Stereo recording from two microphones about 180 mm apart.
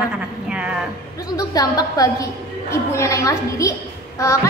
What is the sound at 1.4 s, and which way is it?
A woman's voice, 20° left (ahead or behind).